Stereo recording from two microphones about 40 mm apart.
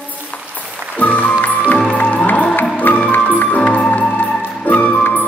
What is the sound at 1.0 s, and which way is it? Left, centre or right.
Music, left.